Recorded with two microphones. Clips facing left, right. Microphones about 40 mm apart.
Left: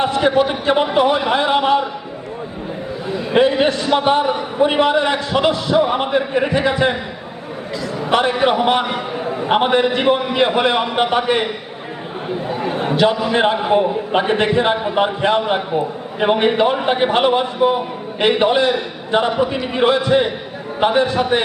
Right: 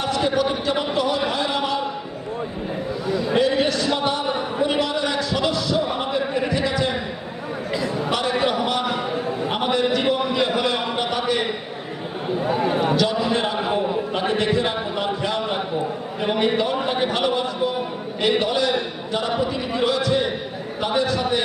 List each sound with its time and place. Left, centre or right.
0.0 s a man's voice: left
3.1 s a man's voice: left
8.1 s a man's voice: left
12.5 s a man's voice: centre
12.8 s a man's voice: left